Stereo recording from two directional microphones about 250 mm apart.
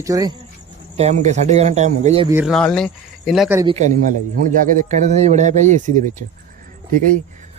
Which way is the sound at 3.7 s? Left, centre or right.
Right.